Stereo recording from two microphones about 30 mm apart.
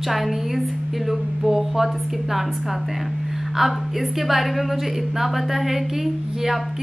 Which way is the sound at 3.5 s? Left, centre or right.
Centre.